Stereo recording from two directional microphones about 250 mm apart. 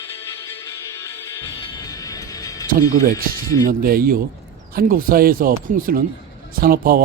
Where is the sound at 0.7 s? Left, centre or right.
Centre.